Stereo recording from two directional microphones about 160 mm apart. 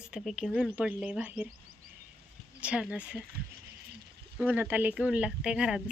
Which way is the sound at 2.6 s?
5° right (ahead or behind).